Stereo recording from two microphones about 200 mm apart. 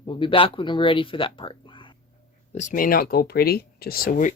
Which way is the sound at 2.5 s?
40° left (ahead or behind).